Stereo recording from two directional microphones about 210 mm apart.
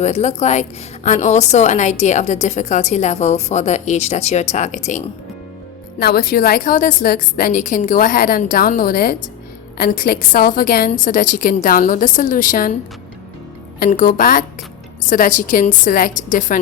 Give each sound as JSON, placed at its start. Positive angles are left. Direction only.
{"t": 0.0, "sound": "a woman's voice", "side_deg": 30}
{"t": 6.0, "sound": "a woman's voice", "side_deg": 45}
{"t": 13.7, "sound": "a woman's voice", "side_deg": 40}